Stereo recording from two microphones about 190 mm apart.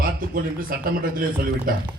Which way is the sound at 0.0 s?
45° right (ahead or behind).